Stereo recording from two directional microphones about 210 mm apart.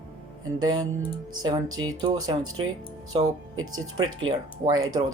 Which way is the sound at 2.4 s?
80° right.